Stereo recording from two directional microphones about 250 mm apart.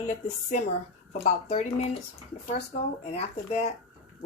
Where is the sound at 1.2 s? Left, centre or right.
Left.